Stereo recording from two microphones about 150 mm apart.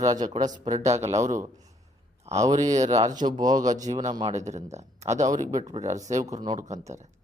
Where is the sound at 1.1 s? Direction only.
55° right (ahead or behind).